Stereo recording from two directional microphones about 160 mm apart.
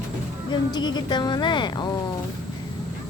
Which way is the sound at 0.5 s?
25° left (ahead or behind).